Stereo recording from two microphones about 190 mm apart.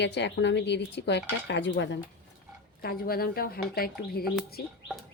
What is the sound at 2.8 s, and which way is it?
Speech, 50° left (ahead or behind).